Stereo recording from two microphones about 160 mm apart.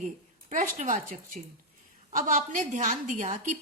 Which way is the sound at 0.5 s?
50° right (ahead or behind).